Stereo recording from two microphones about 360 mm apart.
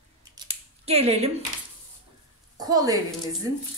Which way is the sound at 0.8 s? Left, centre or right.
Centre.